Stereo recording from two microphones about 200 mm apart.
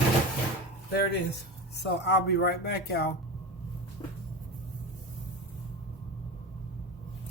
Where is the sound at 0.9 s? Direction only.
55° left (ahead or behind).